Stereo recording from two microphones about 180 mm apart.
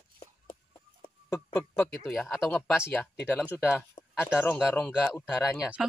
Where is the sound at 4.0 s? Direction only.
15° left (ahead or behind).